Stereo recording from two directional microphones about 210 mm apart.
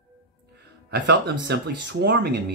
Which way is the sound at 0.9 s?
55° right (ahead or behind).